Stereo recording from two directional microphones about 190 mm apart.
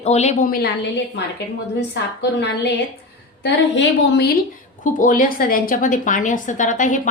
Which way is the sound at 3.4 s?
60° left (ahead or behind).